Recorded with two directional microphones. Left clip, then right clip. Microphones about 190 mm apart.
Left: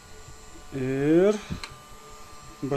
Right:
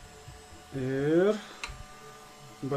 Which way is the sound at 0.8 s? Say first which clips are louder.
Left 4 dB; 45° left (ahead or behind).